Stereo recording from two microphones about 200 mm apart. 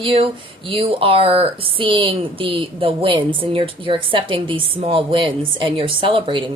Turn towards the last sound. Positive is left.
turn(degrees=-25)  # may be behind; listen again after turning